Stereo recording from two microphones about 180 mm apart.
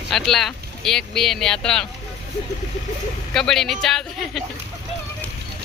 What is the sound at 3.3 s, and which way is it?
Speech, 5° left (ahead or behind).